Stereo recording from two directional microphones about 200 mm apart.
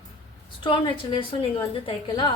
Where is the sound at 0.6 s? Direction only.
25° left (ahead or behind).